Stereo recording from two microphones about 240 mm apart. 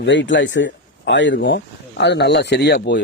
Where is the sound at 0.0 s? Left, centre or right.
Left.